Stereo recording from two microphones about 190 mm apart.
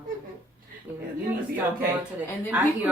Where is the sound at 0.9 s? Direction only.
10° right (ahead or behind).